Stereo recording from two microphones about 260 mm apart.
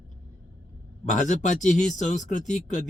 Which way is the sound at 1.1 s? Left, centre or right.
Left.